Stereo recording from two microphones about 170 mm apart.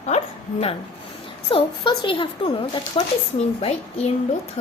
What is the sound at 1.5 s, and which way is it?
A woman's voice, 30° left (ahead or behind).